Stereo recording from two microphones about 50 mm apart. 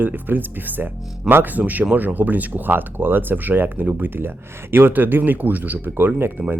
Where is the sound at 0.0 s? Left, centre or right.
Right.